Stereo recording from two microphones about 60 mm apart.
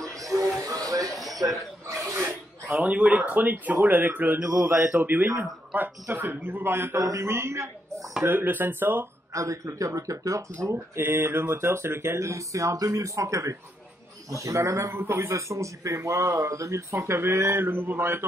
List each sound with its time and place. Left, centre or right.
0.3 s a sound: right
1.1 s a sound: centre
1.9 s a sound: right
2.2 s a man's voice: right
7.0 s speech: right
8.2 s a man's voice: right
9.3 s speech: right
11.0 s speech: right
15.0 s a man's voice: right
15.3 s speech: right